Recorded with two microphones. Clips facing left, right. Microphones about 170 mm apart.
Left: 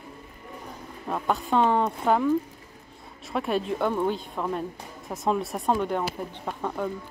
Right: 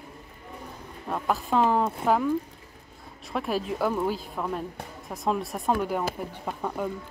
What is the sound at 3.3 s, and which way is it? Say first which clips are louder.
Speech: left 2 dB; centre (ahead or behind).